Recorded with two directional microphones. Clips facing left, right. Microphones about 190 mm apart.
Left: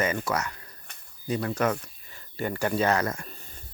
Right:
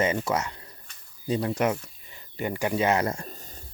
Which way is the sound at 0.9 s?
60° left (ahead or behind).